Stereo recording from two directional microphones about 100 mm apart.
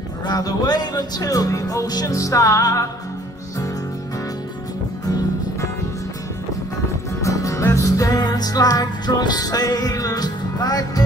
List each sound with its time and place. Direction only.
0.2 s speech: 40° left (ahead or behind)
5.0 s music: 40° left (ahead or behind)
7.2 s music: 30° left (ahead or behind)